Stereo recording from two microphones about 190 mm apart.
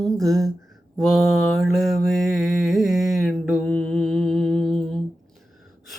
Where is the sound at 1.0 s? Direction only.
Centre (ahead or behind).